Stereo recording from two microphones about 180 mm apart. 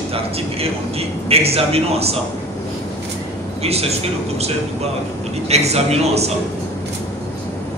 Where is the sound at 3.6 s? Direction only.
35° right (ahead or behind).